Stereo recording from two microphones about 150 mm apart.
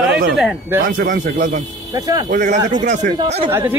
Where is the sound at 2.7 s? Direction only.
55° right (ahead or behind).